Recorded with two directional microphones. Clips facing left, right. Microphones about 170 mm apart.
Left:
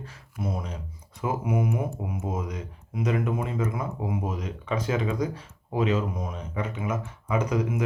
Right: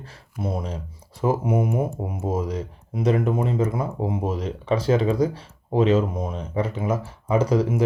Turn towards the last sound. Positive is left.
turn(degrees=-30)  # may be behind; listen again after turning